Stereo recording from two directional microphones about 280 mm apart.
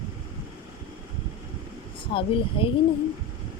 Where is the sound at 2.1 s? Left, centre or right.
Centre.